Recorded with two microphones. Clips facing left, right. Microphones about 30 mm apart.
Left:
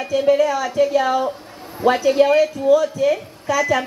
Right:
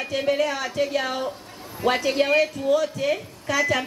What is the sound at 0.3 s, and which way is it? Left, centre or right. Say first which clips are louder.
Speech: left 7 dB; right.